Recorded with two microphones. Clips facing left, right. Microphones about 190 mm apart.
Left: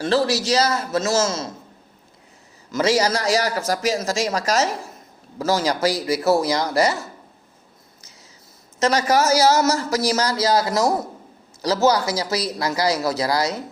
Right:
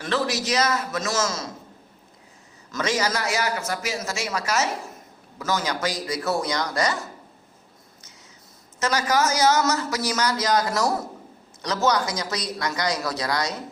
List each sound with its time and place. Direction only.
0.0 s speech: 30° left (ahead or behind)
3.0 s speech: 35° left (ahead or behind)
8.8 s speech: 30° left (ahead or behind)
11.9 s speech: 30° left (ahead or behind)